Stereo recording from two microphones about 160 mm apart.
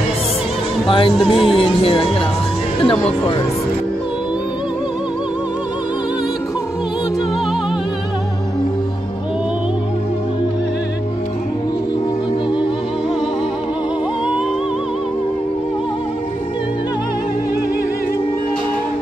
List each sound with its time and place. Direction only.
0.8 s music: 35° left (ahead or behind)
1.1 s music: centre (ahead or behind)
1.5 s music: 35° left (ahead or behind)